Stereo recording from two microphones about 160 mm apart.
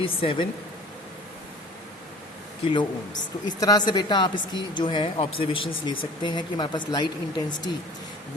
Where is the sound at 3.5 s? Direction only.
25° left (ahead or behind).